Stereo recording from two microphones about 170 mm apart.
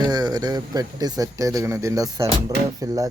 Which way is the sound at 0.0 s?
25° right (ahead or behind).